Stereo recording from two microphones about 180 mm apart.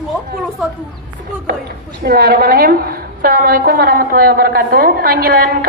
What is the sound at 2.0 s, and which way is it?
A woman's voice, 55° right (ahead or behind).